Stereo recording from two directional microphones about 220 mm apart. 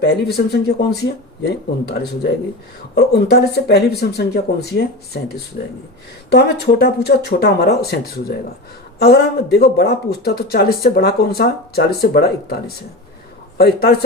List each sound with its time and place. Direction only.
0.0 s speech: 45° left (ahead or behind)
2.9 s speech: 45° left (ahead or behind)